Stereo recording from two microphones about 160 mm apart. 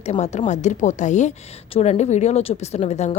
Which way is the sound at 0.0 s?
45° left (ahead or behind).